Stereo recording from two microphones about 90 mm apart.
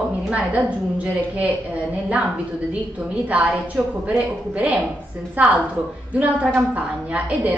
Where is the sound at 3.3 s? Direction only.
15° right (ahead or behind).